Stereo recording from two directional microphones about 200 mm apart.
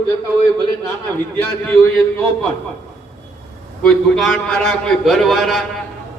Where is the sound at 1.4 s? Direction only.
5° left (ahead or behind).